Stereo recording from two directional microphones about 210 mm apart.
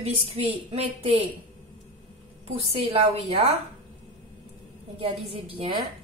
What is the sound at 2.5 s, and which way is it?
Speech, 25° right (ahead or behind).